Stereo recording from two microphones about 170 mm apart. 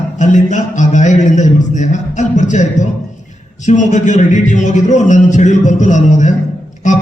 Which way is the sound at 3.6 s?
45° left (ahead or behind).